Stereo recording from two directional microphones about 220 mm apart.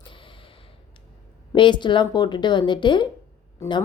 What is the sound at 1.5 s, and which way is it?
Speech, 20° left (ahead or behind).